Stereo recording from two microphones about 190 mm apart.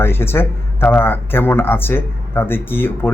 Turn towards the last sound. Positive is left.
turn(degrees=10)  # may be behind; listen again after turning